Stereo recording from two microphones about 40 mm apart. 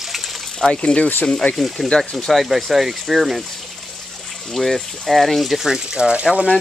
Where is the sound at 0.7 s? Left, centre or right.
Left.